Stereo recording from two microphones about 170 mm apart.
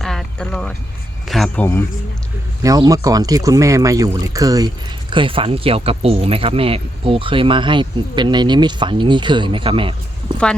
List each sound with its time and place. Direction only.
0.0 s a sound: centre (ahead or behind)
1.3 s speech: centre (ahead or behind)
2.6 s speech: 20° right (ahead or behind)
5.1 s speech: 30° right (ahead or behind)